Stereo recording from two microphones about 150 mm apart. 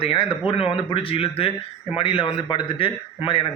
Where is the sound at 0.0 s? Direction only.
40° left (ahead or behind).